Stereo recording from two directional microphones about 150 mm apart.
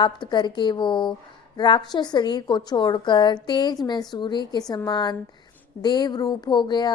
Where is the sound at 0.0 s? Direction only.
30° left (ahead or behind).